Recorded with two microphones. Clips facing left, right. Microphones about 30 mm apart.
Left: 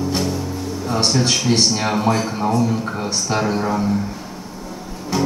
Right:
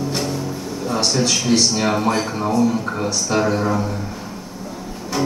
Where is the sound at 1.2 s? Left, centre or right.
Centre.